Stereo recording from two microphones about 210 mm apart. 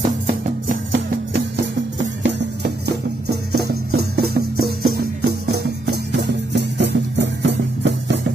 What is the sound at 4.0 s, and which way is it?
Music, 50° right (ahead or behind).